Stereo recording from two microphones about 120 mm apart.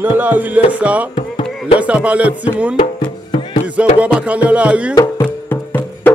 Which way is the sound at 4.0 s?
10° right (ahead or behind).